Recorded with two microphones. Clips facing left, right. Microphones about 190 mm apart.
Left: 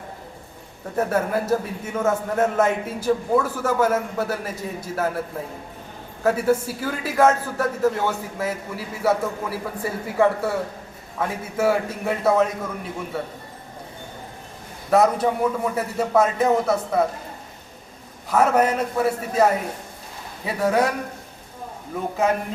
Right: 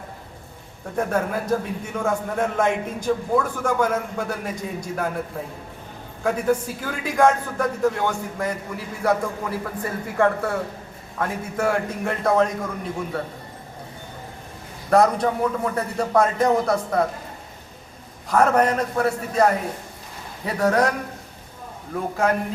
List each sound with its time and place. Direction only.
0.9 s a man's voice: 5° left (ahead or behind)
6.2 s a man's voice: 5° left (ahead or behind)
14.8 s a man's voice: 5° left (ahead or behind)
18.3 s a man's voice: 5° left (ahead or behind)